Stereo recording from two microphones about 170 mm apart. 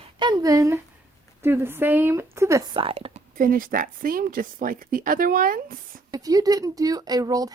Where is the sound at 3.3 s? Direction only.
55° right (ahead or behind).